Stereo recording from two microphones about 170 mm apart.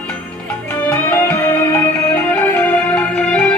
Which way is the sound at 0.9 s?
10° left (ahead or behind).